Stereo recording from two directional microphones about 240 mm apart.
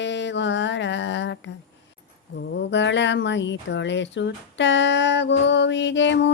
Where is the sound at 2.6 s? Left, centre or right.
Left.